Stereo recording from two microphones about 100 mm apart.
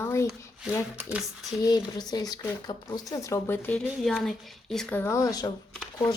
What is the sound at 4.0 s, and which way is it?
Speech, 5° left (ahead or behind).